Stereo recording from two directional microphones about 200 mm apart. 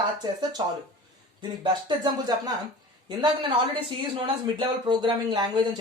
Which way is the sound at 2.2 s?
20° right (ahead or behind).